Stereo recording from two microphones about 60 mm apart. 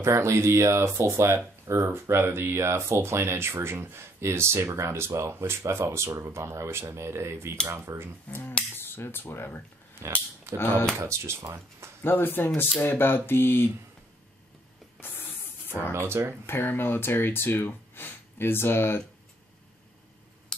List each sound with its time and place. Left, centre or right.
0.0 s speech: right
8.3 s speech: left
10.0 s speech: right
10.6 s speech: left
11.1 s speech: right
12.0 s speech: left
15.0 s spray: left
15.9 s speech: right
16.4 s speech: left